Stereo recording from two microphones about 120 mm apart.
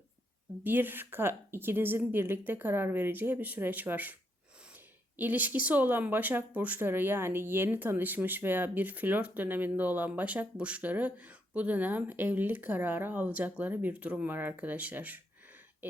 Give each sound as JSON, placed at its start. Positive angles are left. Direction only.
{"t": 0.6, "sound": "speech", "side_deg": -15}
{"t": 5.1, "sound": "speech", "side_deg": -15}